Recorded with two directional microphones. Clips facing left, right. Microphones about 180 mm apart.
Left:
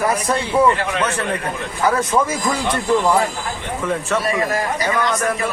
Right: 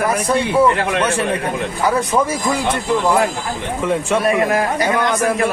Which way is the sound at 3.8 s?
15° right (ahead or behind).